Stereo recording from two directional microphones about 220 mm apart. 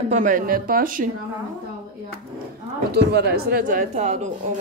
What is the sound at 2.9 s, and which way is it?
Speech, 45° right (ahead or behind).